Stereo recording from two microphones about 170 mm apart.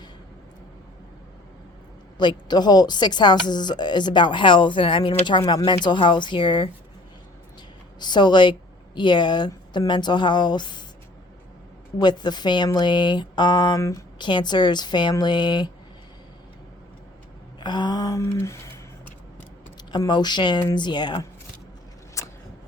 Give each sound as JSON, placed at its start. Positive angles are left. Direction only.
{"t": 2.1, "sound": "a woman's voice", "side_deg": 25}
{"t": 7.9, "sound": "a woman's voice", "side_deg": 25}
{"t": 11.9, "sound": "a woman's voice", "side_deg": 25}
{"t": 17.6, "sound": "a sound", "side_deg": 25}
{"t": 19.9, "sound": "a woman's voice", "side_deg": 25}
{"t": 22.2, "sound": "a sound", "side_deg": 20}